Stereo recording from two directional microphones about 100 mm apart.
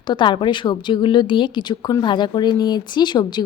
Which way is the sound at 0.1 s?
55° left (ahead or behind).